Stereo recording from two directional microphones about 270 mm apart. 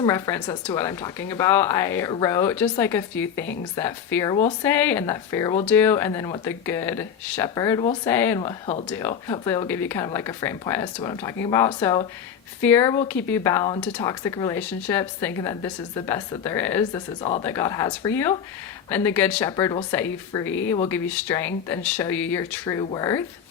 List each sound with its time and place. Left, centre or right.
0.0 s speech: centre
8.4 s speech: centre